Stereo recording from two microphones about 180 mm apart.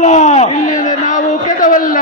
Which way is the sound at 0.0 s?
40° left (ahead or behind).